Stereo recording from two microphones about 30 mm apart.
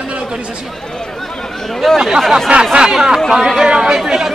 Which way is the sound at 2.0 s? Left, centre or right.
Centre.